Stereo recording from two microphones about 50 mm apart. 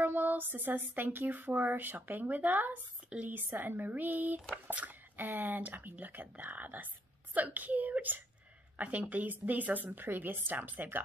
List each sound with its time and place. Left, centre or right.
0.0 s a woman's voice: right
3.3 s a woman's voice: right